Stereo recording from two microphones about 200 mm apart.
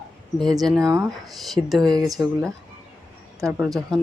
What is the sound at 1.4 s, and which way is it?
Speech, centre (ahead or behind).